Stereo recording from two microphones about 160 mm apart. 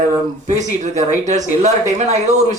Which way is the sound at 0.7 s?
50° right (ahead or behind).